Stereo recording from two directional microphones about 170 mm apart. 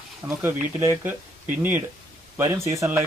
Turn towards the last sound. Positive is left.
turn(degrees=-15)  # may be behind; listen again after turning